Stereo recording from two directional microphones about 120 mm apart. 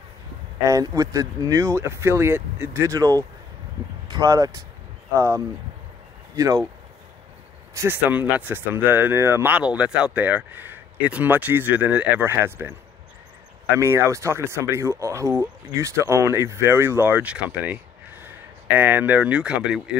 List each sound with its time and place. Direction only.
0.7 s speech: 30° right (ahead or behind)
7.7 s speech: 20° right (ahead or behind)
13.7 s speech: 25° right (ahead or behind); by 19.8 s 5° right (ahead or behind)